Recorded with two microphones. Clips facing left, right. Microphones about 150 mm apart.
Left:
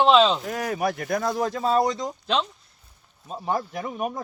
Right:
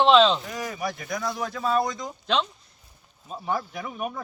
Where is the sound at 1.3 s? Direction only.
35° left (ahead or behind).